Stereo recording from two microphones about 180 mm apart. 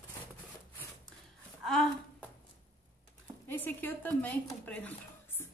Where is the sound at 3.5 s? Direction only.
10° left (ahead or behind).